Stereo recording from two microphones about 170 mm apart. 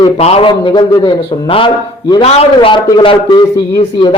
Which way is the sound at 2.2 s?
35° left (ahead or behind).